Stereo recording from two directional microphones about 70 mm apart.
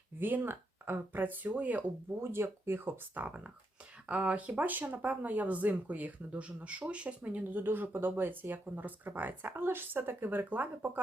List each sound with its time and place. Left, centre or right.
0.2 s speech: right
2.2 s speech: right
4.1 s speech: centre